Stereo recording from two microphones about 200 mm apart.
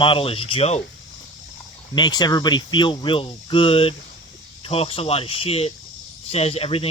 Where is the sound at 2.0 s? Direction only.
20° left (ahead or behind).